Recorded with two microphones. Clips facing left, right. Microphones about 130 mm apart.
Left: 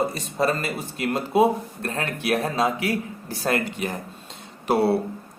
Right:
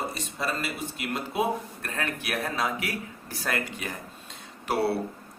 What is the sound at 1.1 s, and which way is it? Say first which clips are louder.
A man's voice: left 8 dB; 30° left (ahead or behind).